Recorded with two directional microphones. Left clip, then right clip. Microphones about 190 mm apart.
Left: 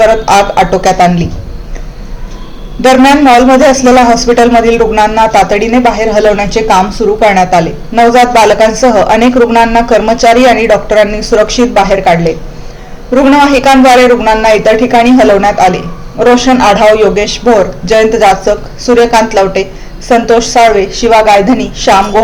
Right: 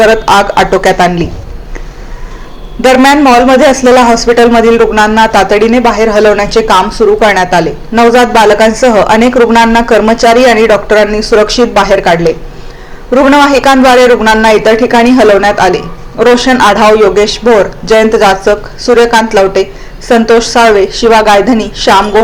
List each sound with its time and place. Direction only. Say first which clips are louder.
0.3 s speech: even; 25° right (ahead or behind)
3.6 s speech: even; 25° right (ahead or behind)
13.5 s speech: even; 25° right (ahead or behind)